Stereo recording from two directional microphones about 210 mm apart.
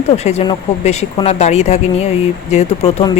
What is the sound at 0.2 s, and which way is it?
A woman's voice, 30° left (ahead or behind).